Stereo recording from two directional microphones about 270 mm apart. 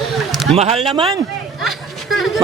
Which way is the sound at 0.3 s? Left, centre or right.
Centre.